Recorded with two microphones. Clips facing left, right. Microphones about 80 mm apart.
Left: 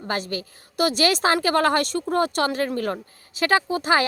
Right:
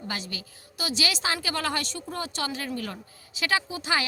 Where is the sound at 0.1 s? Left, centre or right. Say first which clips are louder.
Left 10 dB; left.